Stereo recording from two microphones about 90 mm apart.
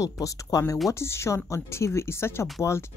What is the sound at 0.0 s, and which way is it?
Speech, 40° left (ahead or behind).